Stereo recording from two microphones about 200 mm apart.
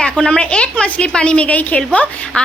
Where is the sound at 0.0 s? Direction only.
5° left (ahead or behind).